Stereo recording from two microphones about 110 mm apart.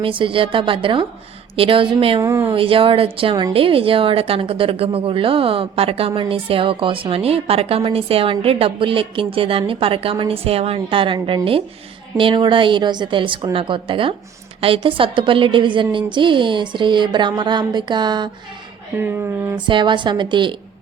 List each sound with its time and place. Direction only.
0.0 s a woman's voice: 50° right (ahead or behind)
2.2 s speech: 25° right (ahead or behind)
2.5 s a woman's voice: 55° right (ahead or behind)
18.9 s speech: 20° right (ahead or behind)
19.5 s a woman's voice: 45° right (ahead or behind)